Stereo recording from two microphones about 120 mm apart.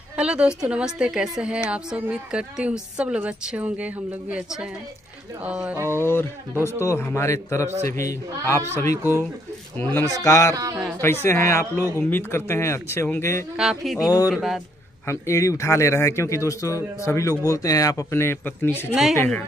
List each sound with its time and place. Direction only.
0.1 s a woman's voice: 10° right (ahead or behind)
5.8 s a sound: 20° right (ahead or behind)
6.6 s a man's voice: 25° left (ahead or behind)
9.8 s speech: 15° left (ahead or behind)
10.2 s a man's voice: 25° left (ahead or behind)
10.5 s a man's voice: 30° right (ahead or behind)
11.0 s a man's voice: 20° left (ahead or behind)
13.6 s a sound: 5° right (ahead or behind)
14.0 s speech: 30° left (ahead or behind)
14.3 s a sound: centre (ahead or behind)
15.0 s a man's voice: 25° left (ahead or behind)